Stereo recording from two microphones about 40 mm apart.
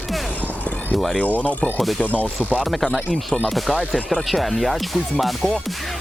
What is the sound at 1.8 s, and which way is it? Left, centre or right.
Speech, centre.